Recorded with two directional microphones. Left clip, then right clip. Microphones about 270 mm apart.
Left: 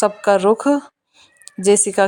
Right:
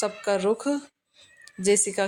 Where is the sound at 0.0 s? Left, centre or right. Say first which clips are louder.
Left 10 dB; left.